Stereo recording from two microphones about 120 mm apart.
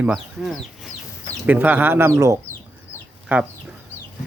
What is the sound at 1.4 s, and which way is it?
Speech, 15° right (ahead or behind).